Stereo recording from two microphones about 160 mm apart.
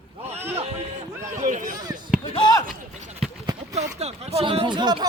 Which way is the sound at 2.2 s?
30° left (ahead or behind).